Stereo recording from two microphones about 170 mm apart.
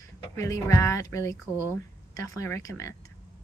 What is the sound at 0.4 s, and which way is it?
Speech, 15° left (ahead or behind).